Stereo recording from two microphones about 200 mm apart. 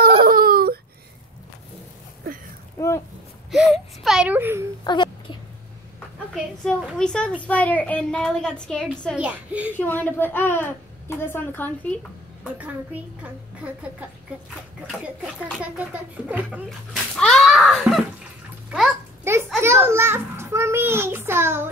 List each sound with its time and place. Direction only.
0.2 s baby cry: 45° right (ahead or behind)
2.8 s a sound: 15° left (ahead or behind)
3.5 s whimper: centre (ahead or behind)
4.8 s a sound: 25° left (ahead or behind)
6.1 s a woman's voice: centre (ahead or behind)
9.8 s a woman's voice: 10° left (ahead or behind)
12.5 s a child's voice: 5° right (ahead or behind)
15.6 s a child's voice: 5° right (ahead or behind)
17.2 s a sound: centre (ahead or behind)
18.7 s a child's voice: centre (ahead or behind)
19.3 s a sound: 15° right (ahead or behind)
19.6 s a child's voice: 10° right (ahead or behind)